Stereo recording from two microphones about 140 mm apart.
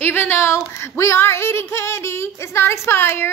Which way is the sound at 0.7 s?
20° left (ahead or behind).